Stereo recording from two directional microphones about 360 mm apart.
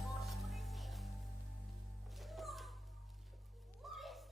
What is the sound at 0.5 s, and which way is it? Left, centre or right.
Music, centre.